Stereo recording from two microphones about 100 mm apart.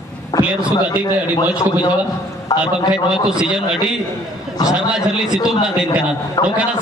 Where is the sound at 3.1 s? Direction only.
5° right (ahead or behind).